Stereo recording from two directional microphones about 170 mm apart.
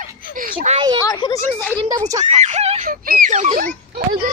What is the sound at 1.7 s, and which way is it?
Speech, 25° right (ahead or behind).